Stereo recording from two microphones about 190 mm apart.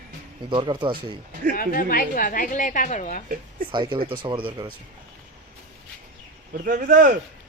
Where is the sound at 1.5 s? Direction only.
50° left (ahead or behind).